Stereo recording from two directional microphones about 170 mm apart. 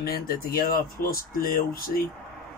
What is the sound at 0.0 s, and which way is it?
Speech, 60° left (ahead or behind).